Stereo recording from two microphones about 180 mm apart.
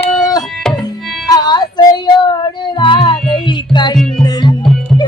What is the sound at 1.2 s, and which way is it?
Music, 20° left (ahead or behind).